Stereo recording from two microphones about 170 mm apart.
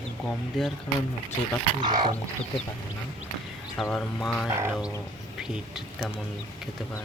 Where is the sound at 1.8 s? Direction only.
25° right (ahead or behind).